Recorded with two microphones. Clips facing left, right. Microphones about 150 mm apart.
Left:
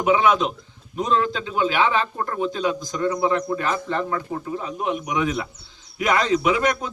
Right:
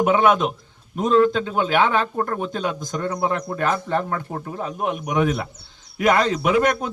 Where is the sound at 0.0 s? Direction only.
50° right (ahead or behind).